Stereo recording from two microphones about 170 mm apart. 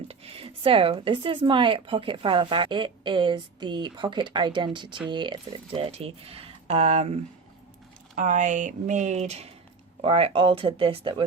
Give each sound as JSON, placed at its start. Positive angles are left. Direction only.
{"t": 0.1, "sound": "a woman's voice", "side_deg": -35}